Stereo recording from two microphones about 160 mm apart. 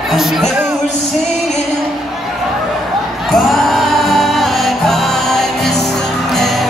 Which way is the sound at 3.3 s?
Centre (ahead or behind).